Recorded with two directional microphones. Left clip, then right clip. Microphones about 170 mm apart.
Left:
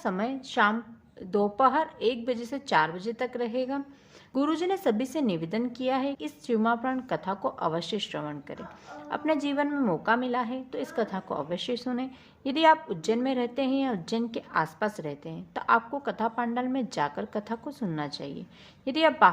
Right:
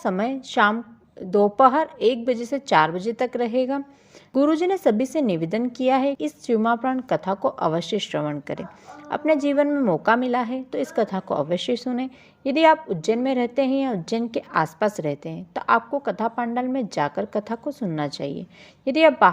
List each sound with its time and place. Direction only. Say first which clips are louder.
0.0 s a woman's voice: right 6 dB; 30° right (ahead or behind)
9.9 s a woman's voice: right 6 dB; 35° right (ahead or behind)